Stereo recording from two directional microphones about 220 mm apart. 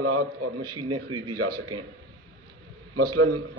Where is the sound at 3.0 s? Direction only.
90° right.